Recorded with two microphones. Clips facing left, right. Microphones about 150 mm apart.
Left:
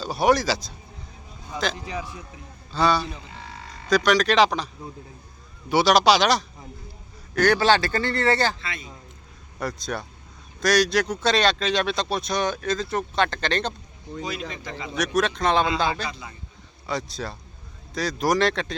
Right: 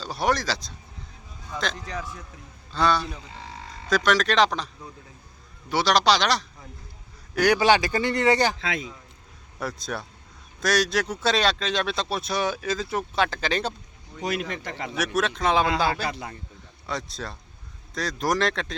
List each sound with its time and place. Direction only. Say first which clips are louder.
0.0 s a man's voice: left 5 dB; 10° left (ahead or behind)
7.3 s speech: even; 10° right (ahead or behind)
8.6 s a man's voice: right 6 dB; 90° right
9.6 s speech: left 2 dB; centre (ahead or behind)
14.2 s a man's voice: right 3 dB; 65° right (ahead or behind)
14.9 s speech: left 3 dB; 5° right (ahead or behind)
16.0 s a man's voice: right 4 dB; 65° right (ahead or behind)
16.8 s speech: left 3 dB; centre (ahead or behind)